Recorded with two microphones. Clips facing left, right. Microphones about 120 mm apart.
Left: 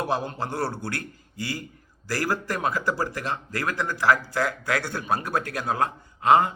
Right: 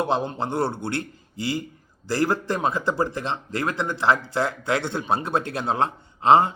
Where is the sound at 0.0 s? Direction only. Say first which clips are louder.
Right 3 dB; 25° right (ahead or behind).